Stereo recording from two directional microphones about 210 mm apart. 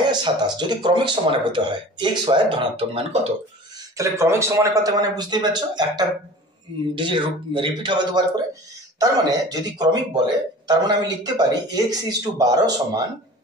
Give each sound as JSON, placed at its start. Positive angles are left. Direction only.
{"t": 0.1, "sound": "speech", "side_deg": -20}
{"t": 3.9, "sound": "speech", "side_deg": -15}